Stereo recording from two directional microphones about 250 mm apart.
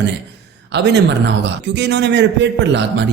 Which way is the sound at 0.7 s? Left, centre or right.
Right.